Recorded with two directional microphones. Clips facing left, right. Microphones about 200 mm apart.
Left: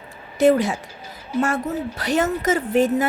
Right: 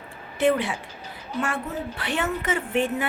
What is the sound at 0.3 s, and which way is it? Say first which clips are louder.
A woman's voice: left 6 dB; 40° left (ahead or behind).